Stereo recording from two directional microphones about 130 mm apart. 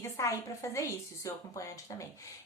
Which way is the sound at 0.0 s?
25° left (ahead or behind).